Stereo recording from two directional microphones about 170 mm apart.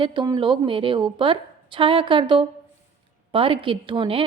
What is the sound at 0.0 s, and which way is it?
A woman's voice, 25° right (ahead or behind).